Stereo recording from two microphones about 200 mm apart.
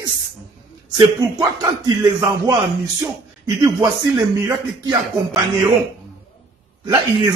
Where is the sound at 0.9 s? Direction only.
25° right (ahead or behind).